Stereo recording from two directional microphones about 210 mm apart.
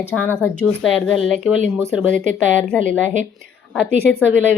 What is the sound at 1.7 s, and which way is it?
Speech, 10° right (ahead or behind).